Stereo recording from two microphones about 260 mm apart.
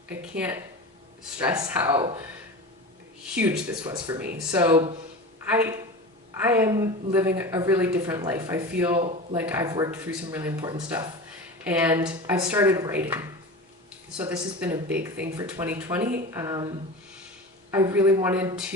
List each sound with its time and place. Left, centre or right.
0.1 s a woman's voice: centre
3.3 s a woman's voice: centre
4.4 s speech: centre
4.6 s a woman's voice: centre
9.0 s speech: right
9.3 s a woman's voice: centre